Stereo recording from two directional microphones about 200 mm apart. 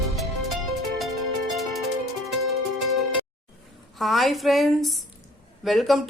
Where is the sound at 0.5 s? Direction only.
Centre (ahead or behind).